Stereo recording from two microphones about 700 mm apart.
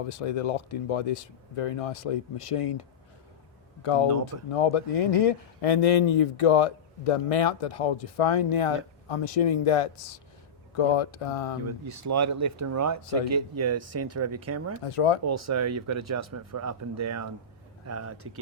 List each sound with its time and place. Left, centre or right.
0.1 s speech: left
3.8 s speech: left
11.9 s speech: right
14.8 s speech: left
15.2 s speech: right